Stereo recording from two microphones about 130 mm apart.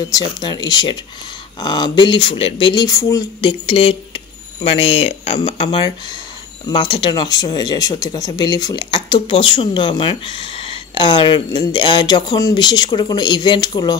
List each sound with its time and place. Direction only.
0.1 s speech: 35° left (ahead or behind)
2.7 s speech: 30° left (ahead or behind)
3.3 s speech: 40° left (ahead or behind)